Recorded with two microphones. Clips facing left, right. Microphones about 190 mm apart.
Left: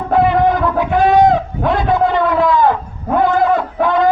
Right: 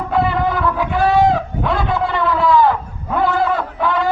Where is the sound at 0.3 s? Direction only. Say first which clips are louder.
Left 5 dB; 20° left (ahead or behind).